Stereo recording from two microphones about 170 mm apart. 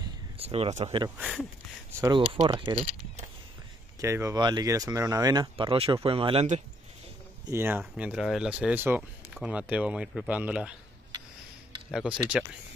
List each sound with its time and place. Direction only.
0.0 s a sound: 35° right (ahead or behind)
1.1 s speech: centre (ahead or behind)
1.9 s speech: 15° right (ahead or behind)
2.1 s speech: 30° right (ahead or behind)
4.0 s speech: 15° right (ahead or behind)
7.4 s speech: 15° right (ahead or behind)
11.9 s speech: 5° right (ahead or behind)